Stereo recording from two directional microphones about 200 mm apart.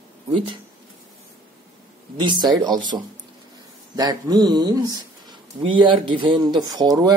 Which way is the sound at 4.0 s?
20° right (ahead or behind).